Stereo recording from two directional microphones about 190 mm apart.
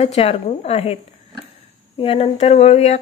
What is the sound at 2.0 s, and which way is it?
A woman's voice, 30° left (ahead or behind).